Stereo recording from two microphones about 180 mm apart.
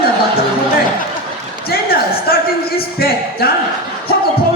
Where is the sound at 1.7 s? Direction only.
55° left (ahead or behind).